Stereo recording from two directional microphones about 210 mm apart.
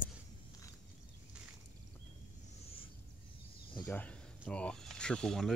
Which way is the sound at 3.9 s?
5° left (ahead or behind).